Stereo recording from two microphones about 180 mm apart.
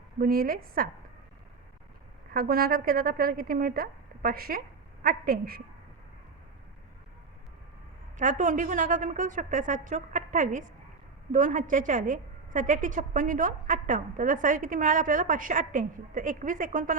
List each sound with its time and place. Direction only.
0.2 s a woman's voice: 55° right (ahead or behind)
2.3 s a woman's voice: 55° right (ahead or behind)
8.2 s a woman's voice: 45° right (ahead or behind)